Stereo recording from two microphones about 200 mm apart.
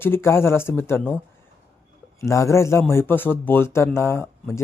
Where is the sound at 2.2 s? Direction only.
15° left (ahead or behind).